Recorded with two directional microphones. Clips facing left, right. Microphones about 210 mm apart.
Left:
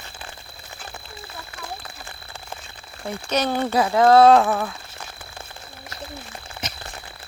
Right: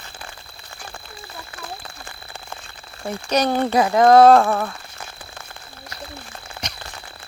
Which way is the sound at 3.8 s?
45° right (ahead or behind).